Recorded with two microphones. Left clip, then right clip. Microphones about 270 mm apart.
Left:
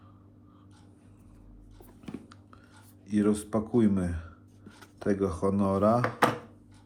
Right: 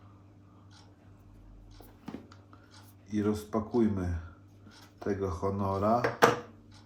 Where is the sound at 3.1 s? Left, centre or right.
Left.